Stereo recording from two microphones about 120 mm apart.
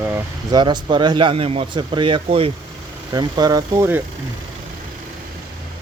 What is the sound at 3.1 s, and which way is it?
Speech, 35° right (ahead or behind).